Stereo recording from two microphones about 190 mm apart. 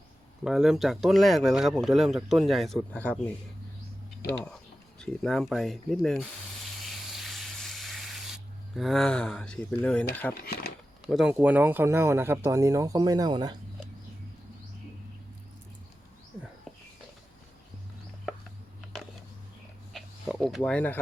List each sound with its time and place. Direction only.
0.4 s speech: centre (ahead or behind)
4.9 s speech: centre (ahead or behind)
7.2 s a sound: centre (ahead or behind)
10.4 s speech: 55° left (ahead or behind)
11.1 s speech: 5° right (ahead or behind); by 13.6 s 20° right (ahead or behind)
19.9 s a sound: centre (ahead or behind)